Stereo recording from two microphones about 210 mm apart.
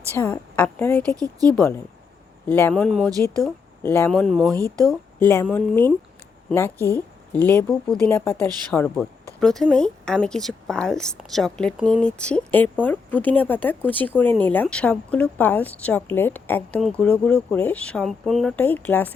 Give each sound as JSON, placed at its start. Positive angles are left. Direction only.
{"t": 0.2, "sound": "speech", "side_deg": 10}
{"t": 1.1, "sound": "speech", "side_deg": -15}
{"t": 2.5, "sound": "a woman's voice", "side_deg": 10}
{"t": 4.5, "sound": "speech", "side_deg": -15}
{"t": 5.2, "sound": "a woman's voice", "side_deg": 10}